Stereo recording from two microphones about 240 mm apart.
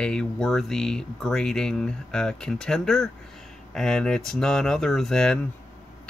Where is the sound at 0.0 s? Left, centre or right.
Centre.